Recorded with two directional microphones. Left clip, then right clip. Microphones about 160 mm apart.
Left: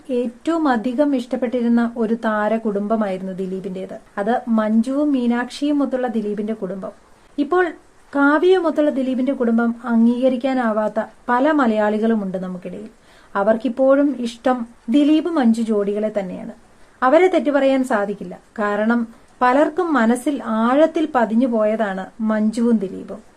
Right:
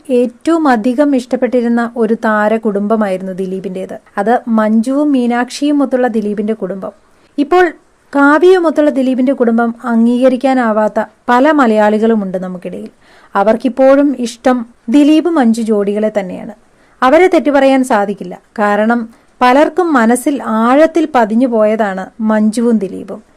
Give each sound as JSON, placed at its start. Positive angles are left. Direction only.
{"t": 0.1, "sound": "speech", "side_deg": -50}